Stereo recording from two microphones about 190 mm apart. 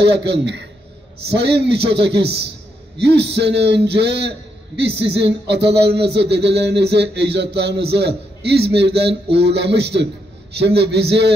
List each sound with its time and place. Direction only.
0.0 s speech: 60° right (ahead or behind)